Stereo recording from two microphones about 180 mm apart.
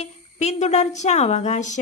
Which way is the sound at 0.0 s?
40° left (ahead or behind).